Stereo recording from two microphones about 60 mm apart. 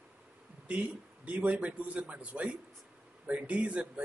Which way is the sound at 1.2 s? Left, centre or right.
Right.